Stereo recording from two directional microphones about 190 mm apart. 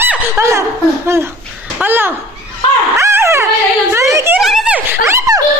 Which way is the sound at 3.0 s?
15° right (ahead or behind).